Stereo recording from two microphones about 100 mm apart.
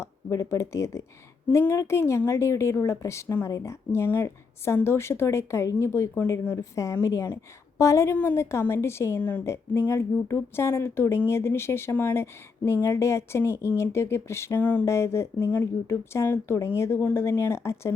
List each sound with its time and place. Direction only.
0.0 s a woman's voice: 30° left (ahead or behind)